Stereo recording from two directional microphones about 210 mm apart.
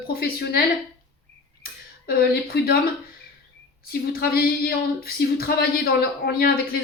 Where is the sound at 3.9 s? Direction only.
45° left (ahead or behind).